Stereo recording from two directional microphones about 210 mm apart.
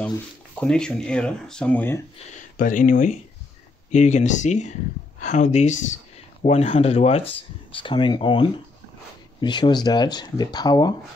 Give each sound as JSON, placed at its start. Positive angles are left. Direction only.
{"t": 0.6, "sound": "speech", "side_deg": 5}
{"t": 2.1, "sound": "speech", "side_deg": 40}